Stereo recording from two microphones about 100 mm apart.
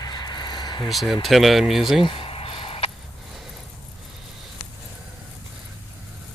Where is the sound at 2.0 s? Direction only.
70° left (ahead or behind).